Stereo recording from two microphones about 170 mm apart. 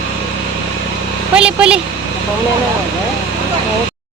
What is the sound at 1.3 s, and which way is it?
Speech, 5° right (ahead or behind).